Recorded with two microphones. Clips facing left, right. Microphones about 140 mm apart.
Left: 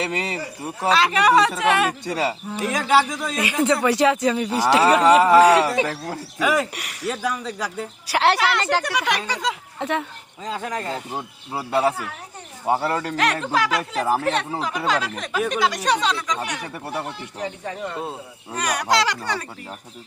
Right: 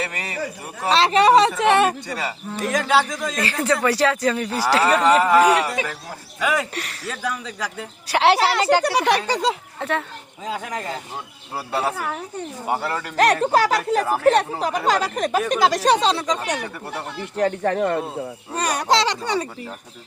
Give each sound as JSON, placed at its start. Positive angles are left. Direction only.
{"t": 0.0, "sound": "speech", "side_deg": 25}
{"t": 0.9, "sound": "speech", "side_deg": -30}
{"t": 2.0, "sound": "speech", "side_deg": 25}
{"t": 2.5, "sound": "speech", "side_deg": 5}
{"t": 5.5, "sound": "speech", "side_deg": 25}
{"t": 6.4, "sound": "speech", "side_deg": 5}
{"t": 8.4, "sound": "speech", "side_deg": -35}
{"t": 10.4, "sound": "speech", "side_deg": -10}
{"t": 12.6, "sound": "speech", "side_deg": 30}
{"t": 13.1, "sound": "speech", "side_deg": -40}
{"t": 17.3, "sound": "speech", "side_deg": -60}
{"t": 18.5, "sound": "speech", "side_deg": -30}